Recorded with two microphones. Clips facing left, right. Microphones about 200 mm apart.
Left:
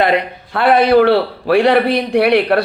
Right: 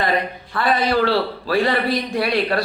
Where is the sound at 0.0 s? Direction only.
70° left (ahead or behind).